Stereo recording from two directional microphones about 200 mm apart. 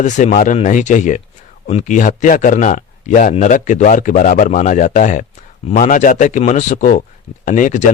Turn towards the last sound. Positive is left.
turn(degrees=40)  # may be behind; listen again after turning